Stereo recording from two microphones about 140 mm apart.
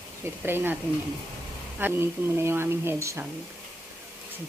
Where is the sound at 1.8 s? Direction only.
15° right (ahead or behind).